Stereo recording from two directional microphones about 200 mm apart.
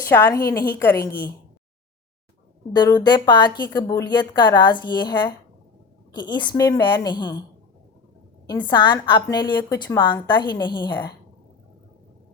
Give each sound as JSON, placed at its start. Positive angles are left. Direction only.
{"t": 0.1, "sound": "a woman's voice", "side_deg": 15}
{"t": 2.7, "sound": "a woman's voice", "side_deg": 20}
{"t": 8.6, "sound": "a woman's voice", "side_deg": 20}